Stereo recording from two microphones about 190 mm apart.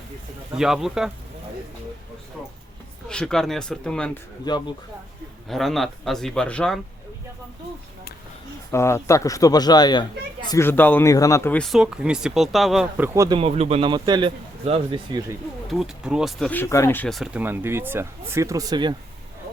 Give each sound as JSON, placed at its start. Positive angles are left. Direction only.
{"t": 0.5, "sound": "speech", "side_deg": 0}
{"t": 3.1, "sound": "speech", "side_deg": 5}
{"t": 4.4, "sound": "speech", "side_deg": 20}
{"t": 5.5, "sound": "speech", "side_deg": 0}
{"t": 8.7, "sound": "speech", "side_deg": 15}
{"t": 13.1, "sound": "a man's voice", "side_deg": -20}
{"t": 13.4, "sound": "a man's voice", "side_deg": -30}
{"t": 15.7, "sound": "speech", "side_deg": -5}
{"t": 17.4, "sound": "speech", "side_deg": -10}